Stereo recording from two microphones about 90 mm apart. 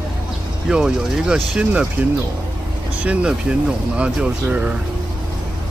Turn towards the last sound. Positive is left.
turn(degrees=-15)  # may be behind; listen again after turning